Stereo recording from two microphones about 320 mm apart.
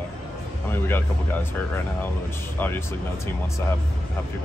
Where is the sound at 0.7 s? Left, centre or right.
Centre.